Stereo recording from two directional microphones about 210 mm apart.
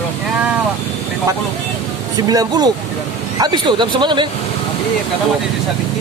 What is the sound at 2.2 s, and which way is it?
Speech, 15° right (ahead or behind).